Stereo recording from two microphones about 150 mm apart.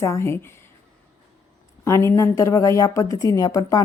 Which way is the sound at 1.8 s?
20° left (ahead or behind).